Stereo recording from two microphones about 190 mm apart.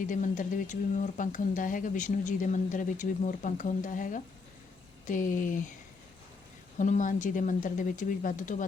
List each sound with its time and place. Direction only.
0.0 s speech: 40° left (ahead or behind)
6.7 s speech: 40° left (ahead or behind)